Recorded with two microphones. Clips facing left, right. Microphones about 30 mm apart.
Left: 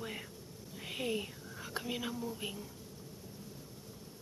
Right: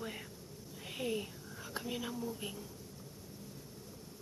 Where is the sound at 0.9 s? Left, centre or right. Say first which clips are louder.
Left 1 dB; centre.